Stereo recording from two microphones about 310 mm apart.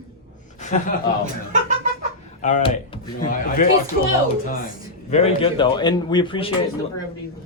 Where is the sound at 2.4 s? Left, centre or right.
Centre.